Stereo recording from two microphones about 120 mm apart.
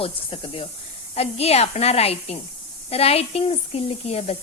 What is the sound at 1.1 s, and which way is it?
A woman's voice, 60° left (ahead or behind).